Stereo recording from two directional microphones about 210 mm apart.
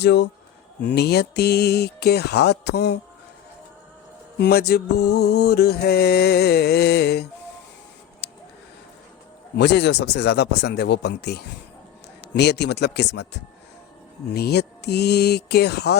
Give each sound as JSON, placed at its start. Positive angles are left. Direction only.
{"t": 0.0, "sound": "speech", "side_deg": 55}
{"t": 0.8, "sound": "mantra", "side_deg": 50}
{"t": 4.4, "sound": "mantra", "side_deg": 50}
{"t": 8.2, "sound": "a sound", "side_deg": 50}
{"t": 9.6, "sound": "mantra", "side_deg": 50}